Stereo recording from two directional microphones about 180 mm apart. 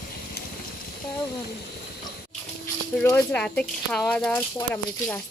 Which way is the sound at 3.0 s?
10° left (ahead or behind).